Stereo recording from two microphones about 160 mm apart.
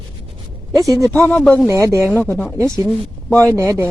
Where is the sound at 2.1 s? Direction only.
10° left (ahead or behind).